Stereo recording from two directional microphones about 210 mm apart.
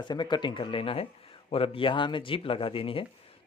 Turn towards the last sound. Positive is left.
turn(degrees=25)  # may be behind; listen again after turning